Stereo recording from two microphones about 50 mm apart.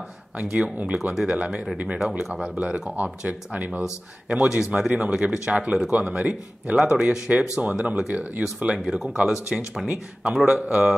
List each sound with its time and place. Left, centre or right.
0.4 s speech: right
2.0 s speech: centre
2.5 s speech: right
4.3 s speech: centre
8.7 s speech: centre